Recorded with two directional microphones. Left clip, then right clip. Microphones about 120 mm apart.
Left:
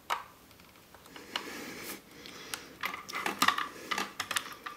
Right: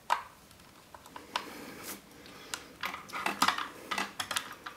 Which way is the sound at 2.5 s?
Centre (ahead or behind).